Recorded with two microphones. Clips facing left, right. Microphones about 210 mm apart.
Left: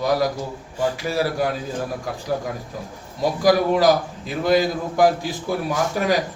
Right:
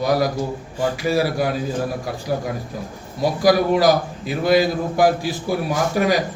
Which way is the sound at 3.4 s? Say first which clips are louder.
Right 1 dB; 10° right (ahead or behind).